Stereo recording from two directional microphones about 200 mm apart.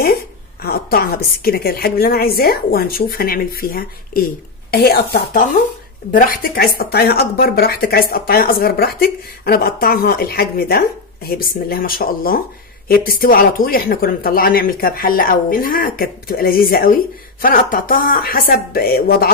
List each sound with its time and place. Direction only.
0.7 s speech: 50° left (ahead or behind)